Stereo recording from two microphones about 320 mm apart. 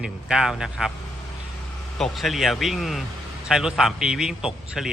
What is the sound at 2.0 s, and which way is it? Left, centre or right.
A man's voice, centre.